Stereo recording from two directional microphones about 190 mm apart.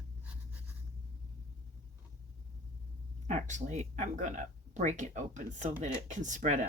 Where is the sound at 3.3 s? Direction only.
40° right (ahead or behind).